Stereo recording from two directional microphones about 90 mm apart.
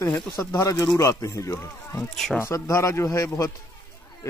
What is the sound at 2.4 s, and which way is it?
Speech, 35° left (ahead or behind).